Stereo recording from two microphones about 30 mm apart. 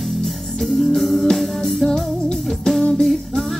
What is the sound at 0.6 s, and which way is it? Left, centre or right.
Music, centre.